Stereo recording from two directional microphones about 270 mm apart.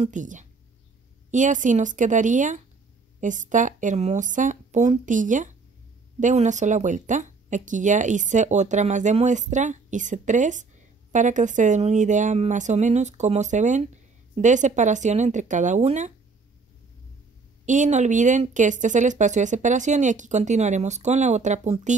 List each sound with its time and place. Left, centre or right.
0.0 s speech: right
17.6 s speech: right